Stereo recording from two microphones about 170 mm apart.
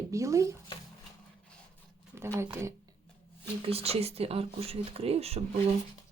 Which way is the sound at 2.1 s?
15° right (ahead or behind).